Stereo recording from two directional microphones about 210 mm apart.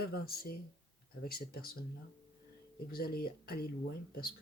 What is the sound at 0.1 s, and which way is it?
Speech, 45° left (ahead or behind).